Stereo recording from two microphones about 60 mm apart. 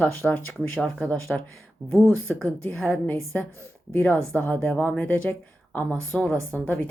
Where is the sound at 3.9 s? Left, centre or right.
Left.